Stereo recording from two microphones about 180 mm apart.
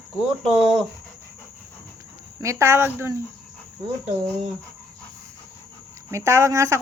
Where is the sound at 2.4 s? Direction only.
15° right (ahead or behind).